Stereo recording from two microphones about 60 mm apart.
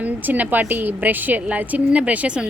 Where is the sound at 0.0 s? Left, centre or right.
Right.